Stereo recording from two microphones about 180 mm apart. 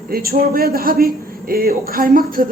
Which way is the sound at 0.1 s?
55° right (ahead or behind).